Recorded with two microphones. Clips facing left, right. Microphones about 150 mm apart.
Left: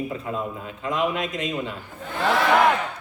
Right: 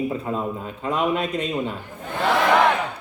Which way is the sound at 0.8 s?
35° right (ahead or behind).